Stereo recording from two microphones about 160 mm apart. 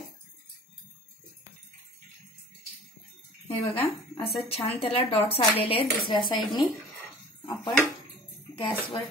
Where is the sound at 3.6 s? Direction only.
35° left (ahead or behind).